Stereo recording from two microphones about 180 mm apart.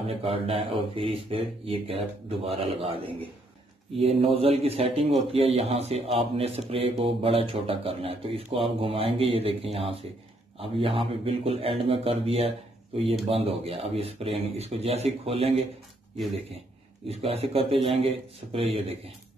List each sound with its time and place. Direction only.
0.1 s a man's voice: 30° right (ahead or behind)
17.1 s a man's voice: 35° right (ahead or behind)